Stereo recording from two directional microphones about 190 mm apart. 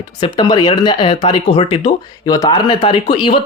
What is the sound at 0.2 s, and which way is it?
Speech, 25° left (ahead or behind).